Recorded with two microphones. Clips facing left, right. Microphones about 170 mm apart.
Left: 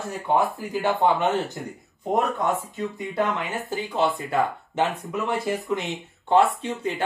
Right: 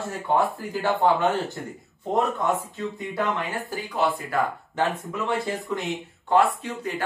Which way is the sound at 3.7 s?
20° left (ahead or behind).